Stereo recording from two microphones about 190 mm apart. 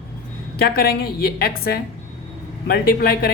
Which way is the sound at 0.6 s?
55° left (ahead or behind).